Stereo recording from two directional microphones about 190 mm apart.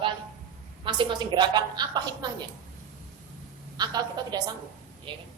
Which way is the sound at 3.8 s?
20° right (ahead or behind).